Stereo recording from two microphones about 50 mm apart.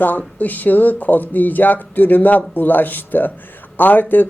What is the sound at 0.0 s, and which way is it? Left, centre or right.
Speech, left.